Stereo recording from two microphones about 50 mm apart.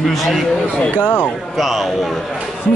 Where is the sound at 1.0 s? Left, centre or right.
Left.